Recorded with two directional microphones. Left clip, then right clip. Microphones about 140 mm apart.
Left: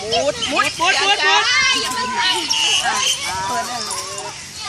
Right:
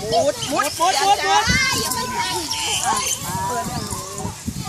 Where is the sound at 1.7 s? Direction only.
5° right (ahead or behind).